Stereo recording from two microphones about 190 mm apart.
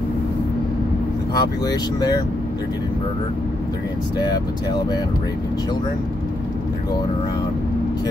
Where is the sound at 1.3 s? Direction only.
20° left (ahead or behind).